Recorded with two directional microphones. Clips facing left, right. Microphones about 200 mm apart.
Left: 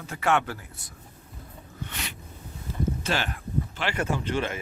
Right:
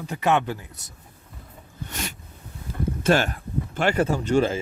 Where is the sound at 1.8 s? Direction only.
45° right (ahead or behind).